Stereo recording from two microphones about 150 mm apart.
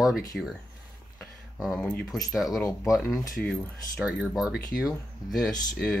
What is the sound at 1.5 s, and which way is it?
Speech, 5° right (ahead or behind).